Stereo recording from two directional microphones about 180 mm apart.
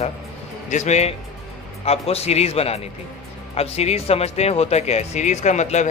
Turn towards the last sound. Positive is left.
turn(degrees=40)  # may be behind; listen again after turning